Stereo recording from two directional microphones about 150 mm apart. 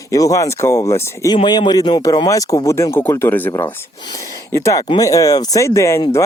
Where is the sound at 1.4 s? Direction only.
30° left (ahead or behind); by 3.5 s 15° left (ahead or behind).